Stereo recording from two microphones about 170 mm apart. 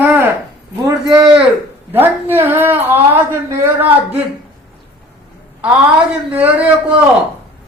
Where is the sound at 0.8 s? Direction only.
25° right (ahead or behind).